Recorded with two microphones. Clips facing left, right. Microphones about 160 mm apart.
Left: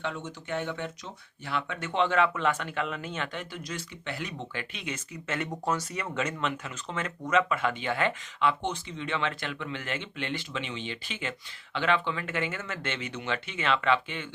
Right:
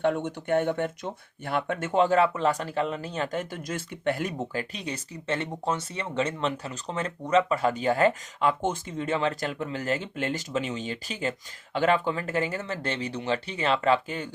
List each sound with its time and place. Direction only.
0.0 s speech: 55° right (ahead or behind); by 14.3 s 40° right (ahead or behind)